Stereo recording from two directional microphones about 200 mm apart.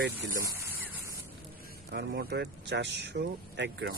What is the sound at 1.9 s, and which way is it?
Speech, 60° right (ahead or behind).